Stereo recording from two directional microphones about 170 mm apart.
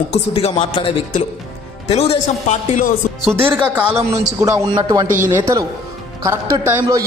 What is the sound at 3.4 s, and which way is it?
A man's voice, 10° right (ahead or behind).